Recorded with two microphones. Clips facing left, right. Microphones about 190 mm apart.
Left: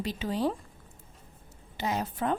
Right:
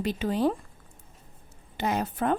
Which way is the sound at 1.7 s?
55° right (ahead or behind).